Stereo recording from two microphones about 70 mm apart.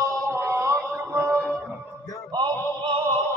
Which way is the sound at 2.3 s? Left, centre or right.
Right.